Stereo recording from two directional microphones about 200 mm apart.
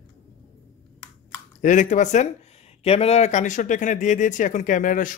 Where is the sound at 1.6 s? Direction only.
40° left (ahead or behind).